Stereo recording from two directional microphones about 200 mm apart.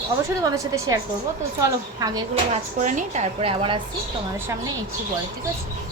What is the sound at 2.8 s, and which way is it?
Speech, 40° right (ahead or behind).